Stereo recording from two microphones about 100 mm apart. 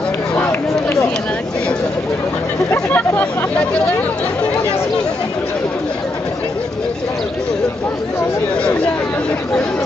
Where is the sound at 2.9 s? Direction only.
20° left (ahead or behind).